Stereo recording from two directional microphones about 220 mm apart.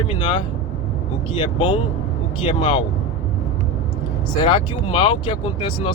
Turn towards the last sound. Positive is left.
turn(degrees=20)  # may be behind; listen again after turning